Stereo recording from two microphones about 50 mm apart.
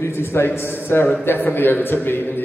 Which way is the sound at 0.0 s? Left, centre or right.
Left.